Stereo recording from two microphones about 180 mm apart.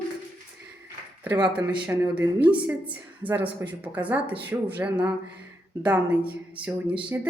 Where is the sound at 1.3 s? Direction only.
20° right (ahead or behind).